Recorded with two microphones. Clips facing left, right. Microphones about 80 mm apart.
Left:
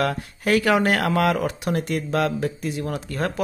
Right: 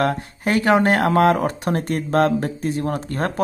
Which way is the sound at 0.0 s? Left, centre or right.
Right.